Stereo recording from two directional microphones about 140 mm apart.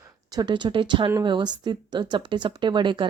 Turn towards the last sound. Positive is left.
turn(degrees=-35)  # may be behind; listen again after turning